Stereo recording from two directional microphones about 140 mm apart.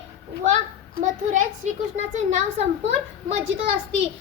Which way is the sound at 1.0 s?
65° right (ahead or behind).